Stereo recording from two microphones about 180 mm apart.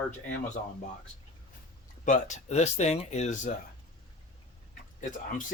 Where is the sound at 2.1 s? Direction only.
40° left (ahead or behind).